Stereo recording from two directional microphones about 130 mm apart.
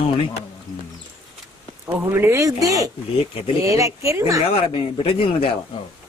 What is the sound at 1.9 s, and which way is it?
Speech, 15° right (ahead or behind).